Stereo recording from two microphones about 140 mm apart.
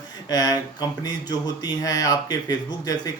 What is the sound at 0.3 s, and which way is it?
Speech, 25° left (ahead or behind).